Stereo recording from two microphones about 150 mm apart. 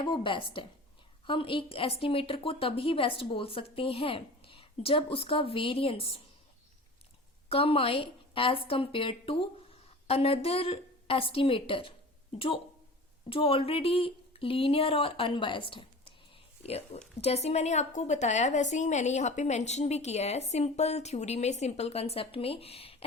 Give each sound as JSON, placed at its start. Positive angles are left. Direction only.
{"t": 0.0, "sound": "speech", "side_deg": 35}
{"t": 7.5, "sound": "speech", "side_deg": 40}
{"t": 13.3, "sound": "a woman's voice", "side_deg": 35}